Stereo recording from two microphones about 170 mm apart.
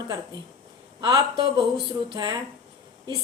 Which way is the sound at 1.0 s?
25° right (ahead or behind).